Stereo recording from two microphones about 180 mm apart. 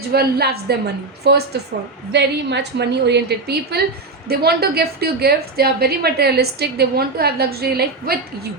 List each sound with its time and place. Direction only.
0.1 s a woman's voice: 60° right (ahead or behind)